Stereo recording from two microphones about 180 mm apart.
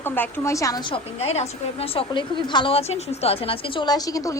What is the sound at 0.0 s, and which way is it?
A woman's voice, 10° left (ahead or behind).